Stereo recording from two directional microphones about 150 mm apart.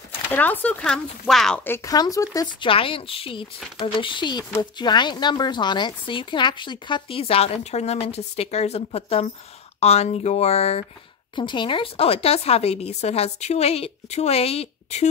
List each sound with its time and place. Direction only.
0.3 s speech: 10° left (ahead or behind)
1.6 s a woman's voice: 20° left (ahead or behind); by 10.9 s 45° left (ahead or behind)
11.3 s a woman's voice: 30° left (ahead or behind)